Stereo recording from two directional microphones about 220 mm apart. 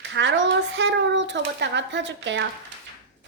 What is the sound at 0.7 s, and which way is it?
Speech, 55° right (ahead or behind).